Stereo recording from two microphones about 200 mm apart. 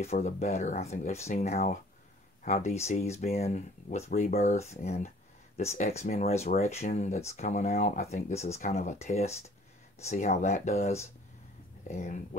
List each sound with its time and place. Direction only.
0.0 s speech: 30° left (ahead or behind)